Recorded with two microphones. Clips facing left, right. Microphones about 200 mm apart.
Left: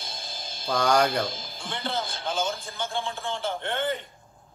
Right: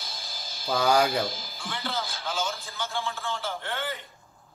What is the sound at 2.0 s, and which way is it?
Speech, 55° left (ahead or behind).